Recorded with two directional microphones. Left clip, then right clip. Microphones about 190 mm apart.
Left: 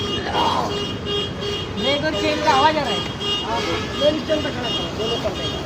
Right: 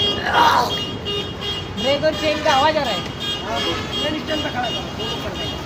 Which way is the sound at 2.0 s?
5° right (ahead or behind).